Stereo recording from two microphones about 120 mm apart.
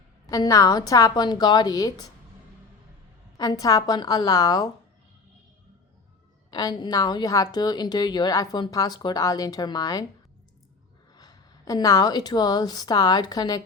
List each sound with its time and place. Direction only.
0.3 s a woman's voice: 30° left (ahead or behind)
3.3 s a woman's voice: 30° left (ahead or behind)
6.5 s a woman's voice: 35° left (ahead or behind)
11.1 s a woman's voice: 35° left (ahead or behind)